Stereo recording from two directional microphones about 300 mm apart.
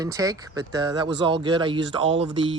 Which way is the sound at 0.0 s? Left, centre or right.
Centre.